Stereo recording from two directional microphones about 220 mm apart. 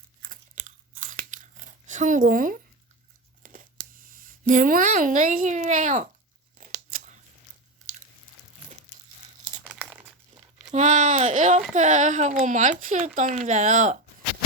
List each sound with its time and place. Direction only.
0.2 s crunch: 35° right (ahead or behind)
3.4 s tearing: 40° right (ahead or behind)
4.0 s speech: 40° right (ahead or behind)
9.4 s crumpling: 35° right (ahead or behind)
9.6 s crumpling: 5° right (ahead or behind)
10.7 s speech: 35° right (ahead or behind)